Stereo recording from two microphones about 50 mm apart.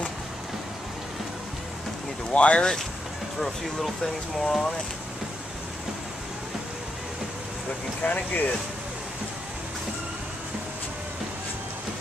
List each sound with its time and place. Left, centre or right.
2.3 s speech: left
3.3 s speech: centre
8.0 s speech: left